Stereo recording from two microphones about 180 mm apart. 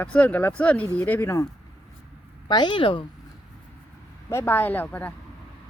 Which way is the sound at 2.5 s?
25° left (ahead or behind).